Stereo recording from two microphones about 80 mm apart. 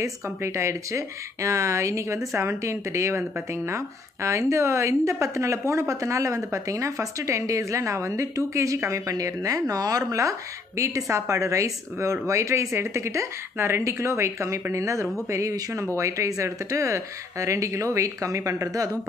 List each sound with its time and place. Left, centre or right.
0.0 s speech: right